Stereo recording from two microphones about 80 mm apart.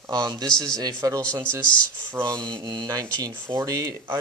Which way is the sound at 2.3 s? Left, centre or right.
Right.